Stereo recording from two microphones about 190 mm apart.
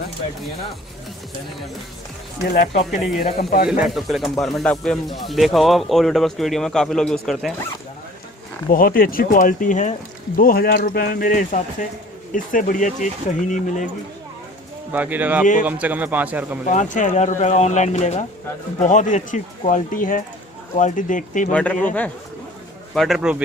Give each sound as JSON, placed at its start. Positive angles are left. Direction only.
{"t": 2.9, "sound": "speech", "side_deg": 0}
{"t": 3.3, "sound": "speech", "side_deg": 55}
{"t": 3.6, "sound": "speech", "side_deg": 0}
{"t": 8.7, "sound": "speech", "side_deg": 50}
{"t": 14.9, "sound": "a man's voice", "side_deg": -10}
{"t": 16.6, "sound": "speech", "side_deg": 40}
{"t": 21.5, "sound": "speech", "side_deg": 5}